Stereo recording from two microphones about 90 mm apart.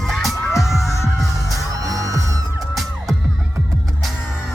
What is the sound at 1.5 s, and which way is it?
Music, 40° right (ahead or behind).